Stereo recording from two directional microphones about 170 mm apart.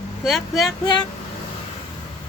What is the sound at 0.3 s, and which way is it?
Speech, centre (ahead or behind).